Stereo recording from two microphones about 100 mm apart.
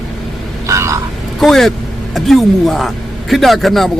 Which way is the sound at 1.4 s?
5° left (ahead or behind).